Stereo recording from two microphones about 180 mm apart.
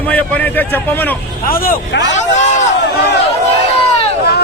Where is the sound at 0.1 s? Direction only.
10° left (ahead or behind).